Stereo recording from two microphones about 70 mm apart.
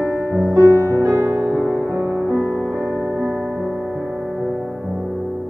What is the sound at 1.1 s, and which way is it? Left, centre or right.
Music, right.